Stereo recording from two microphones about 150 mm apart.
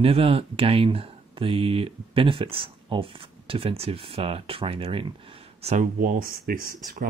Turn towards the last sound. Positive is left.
turn(degrees=-75)  # may be behind; listen again after turning